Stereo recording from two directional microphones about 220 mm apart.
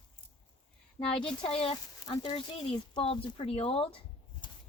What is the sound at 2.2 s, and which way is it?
Speech, 20° left (ahead or behind).